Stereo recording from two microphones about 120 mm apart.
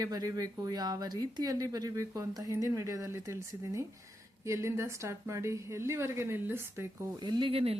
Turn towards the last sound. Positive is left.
turn(degrees=-50)  # may be behind; listen again after turning